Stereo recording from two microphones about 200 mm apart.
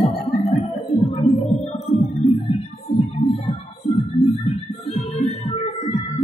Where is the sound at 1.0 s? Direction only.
20° left (ahead or behind).